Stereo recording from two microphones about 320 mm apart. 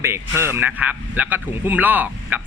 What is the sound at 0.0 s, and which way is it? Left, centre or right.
Speech, centre.